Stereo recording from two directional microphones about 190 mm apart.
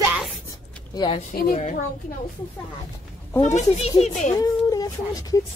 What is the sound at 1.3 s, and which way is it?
Speech, 50° left (ahead or behind).